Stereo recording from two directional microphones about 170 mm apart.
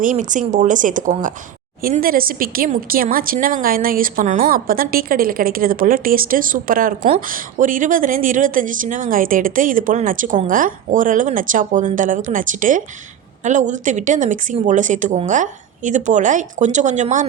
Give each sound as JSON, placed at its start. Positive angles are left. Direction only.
{"t": 0.0, "sound": "a woman's voice", "side_deg": -50}